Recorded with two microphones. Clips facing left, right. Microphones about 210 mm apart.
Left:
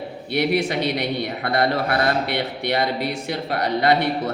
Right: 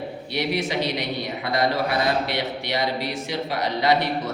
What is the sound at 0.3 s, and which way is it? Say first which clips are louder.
A man's voice: left 4 dB; 55° left (ahead or behind).